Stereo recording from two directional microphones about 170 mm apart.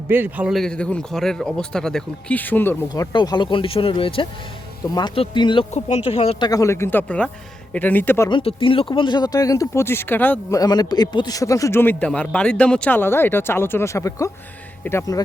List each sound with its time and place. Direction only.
0.1 s speech: 10° right (ahead or behind); by 2.7 s 10° left (ahead or behind)
2.9 s speech: 25° left (ahead or behind)
6.5 s a man's voice: 15° left (ahead or behind)
8.3 s speech: 30° left (ahead or behind); by 10.6 s 10° left (ahead or behind)
10.6 s a man's voice: 25° left (ahead or behind)